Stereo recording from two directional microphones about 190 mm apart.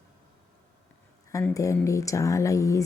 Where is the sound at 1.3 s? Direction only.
15° left (ahead or behind).